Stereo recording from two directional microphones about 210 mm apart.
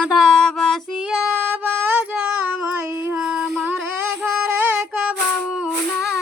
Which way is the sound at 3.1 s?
5° right (ahead or behind).